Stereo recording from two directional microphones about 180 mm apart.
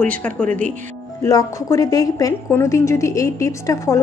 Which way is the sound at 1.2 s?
20° left (ahead or behind).